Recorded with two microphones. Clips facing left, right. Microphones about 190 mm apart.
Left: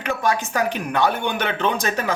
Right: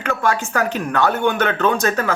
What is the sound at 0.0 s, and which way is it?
Speech, 15° left (ahead or behind).